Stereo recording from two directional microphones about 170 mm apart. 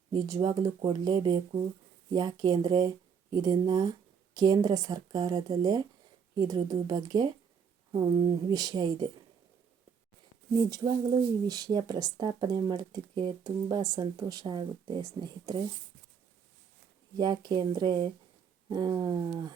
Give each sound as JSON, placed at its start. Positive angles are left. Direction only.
{"t": 0.3, "sound": "speech", "side_deg": -20}
{"t": 10.7, "sound": "speech", "side_deg": -25}
{"t": 17.2, "sound": "speech", "side_deg": -25}